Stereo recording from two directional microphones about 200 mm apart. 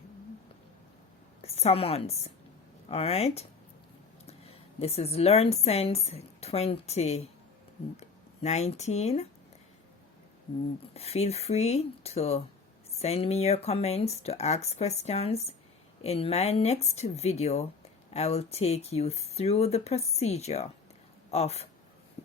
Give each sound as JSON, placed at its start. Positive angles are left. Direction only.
{"t": 1.4, "sound": "a woman's voice", "side_deg": 30}
{"t": 10.9, "sound": "speech", "side_deg": 30}